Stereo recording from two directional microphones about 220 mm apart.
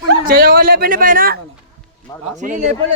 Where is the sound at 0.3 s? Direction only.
40° right (ahead or behind).